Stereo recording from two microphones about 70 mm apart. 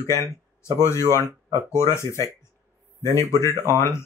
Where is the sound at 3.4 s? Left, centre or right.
Left.